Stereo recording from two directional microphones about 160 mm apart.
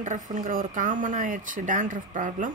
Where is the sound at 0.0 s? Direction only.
55° right (ahead or behind).